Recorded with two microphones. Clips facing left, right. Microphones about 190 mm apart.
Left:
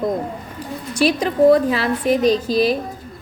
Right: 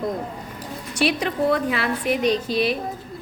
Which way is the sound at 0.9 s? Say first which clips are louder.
Left 5 dB; 35° left (ahead or behind).